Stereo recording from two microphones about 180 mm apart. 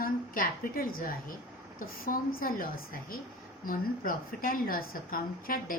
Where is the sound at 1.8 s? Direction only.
55° left (ahead or behind).